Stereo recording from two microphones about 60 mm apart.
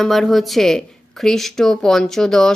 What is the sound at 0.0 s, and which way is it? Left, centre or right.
A woman's voice, centre.